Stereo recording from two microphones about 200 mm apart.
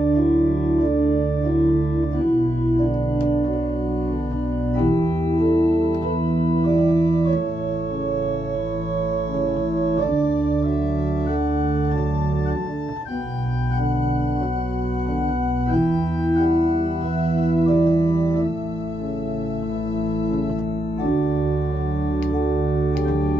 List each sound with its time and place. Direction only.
17.5 s organ: 25° left (ahead or behind)